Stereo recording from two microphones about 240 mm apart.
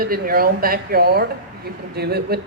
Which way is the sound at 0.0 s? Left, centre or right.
Right.